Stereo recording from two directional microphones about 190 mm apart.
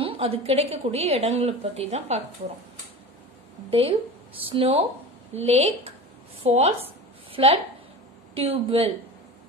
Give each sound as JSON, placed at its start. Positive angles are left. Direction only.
{"t": 0.0, "sound": "a woman's voice", "side_deg": -30}
{"t": 3.7, "sound": "a woman's voice", "side_deg": -30}